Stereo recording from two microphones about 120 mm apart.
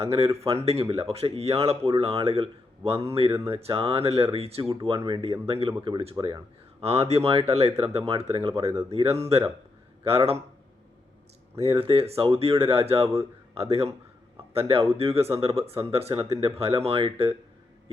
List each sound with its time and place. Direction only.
0.0 s speech: 55° right (ahead or behind)
6.2 s speech: 25° right (ahead or behind)
6.8 s speech: 55° right (ahead or behind)
11.6 s speech: 50° right (ahead or behind)